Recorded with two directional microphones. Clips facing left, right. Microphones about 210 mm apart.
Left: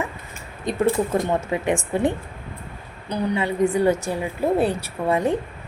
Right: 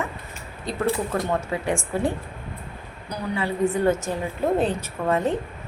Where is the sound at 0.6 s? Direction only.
20° left (ahead or behind).